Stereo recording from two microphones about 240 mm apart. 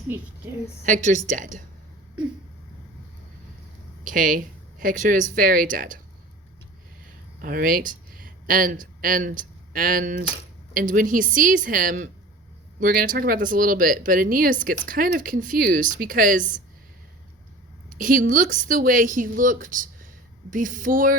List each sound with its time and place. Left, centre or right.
0.9 s speech: right
4.0 s speech: right
7.4 s speech: right
17.8 s speech: right